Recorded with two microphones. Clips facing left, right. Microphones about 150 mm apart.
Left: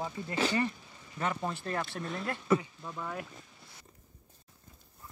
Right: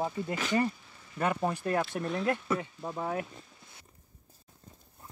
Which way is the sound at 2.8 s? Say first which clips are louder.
Right 6 dB; 35° right (ahead or behind).